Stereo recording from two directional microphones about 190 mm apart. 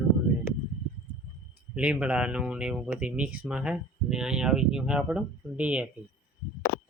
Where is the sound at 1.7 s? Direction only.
5° right (ahead or behind).